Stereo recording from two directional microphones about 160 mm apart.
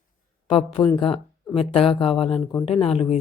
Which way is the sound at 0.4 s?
30° left (ahead or behind).